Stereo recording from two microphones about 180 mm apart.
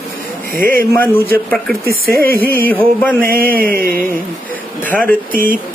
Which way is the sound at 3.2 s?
55° right (ahead or behind).